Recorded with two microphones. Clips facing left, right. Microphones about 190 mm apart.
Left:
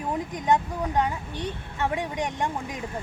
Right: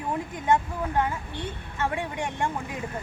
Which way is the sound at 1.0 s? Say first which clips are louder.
Left 1 dB; 15° left (ahead or behind).